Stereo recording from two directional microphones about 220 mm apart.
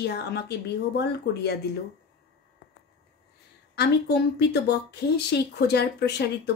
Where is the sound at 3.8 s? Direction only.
50° left (ahead or behind).